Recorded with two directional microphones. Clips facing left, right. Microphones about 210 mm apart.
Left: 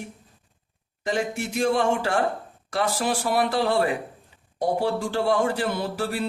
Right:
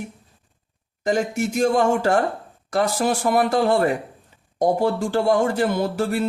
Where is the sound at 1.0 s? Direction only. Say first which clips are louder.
Right 5 dB; 45° right (ahead or behind).